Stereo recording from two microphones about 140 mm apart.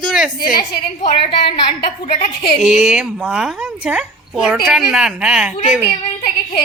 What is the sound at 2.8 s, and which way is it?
A woman's voice, 5° right (ahead or behind).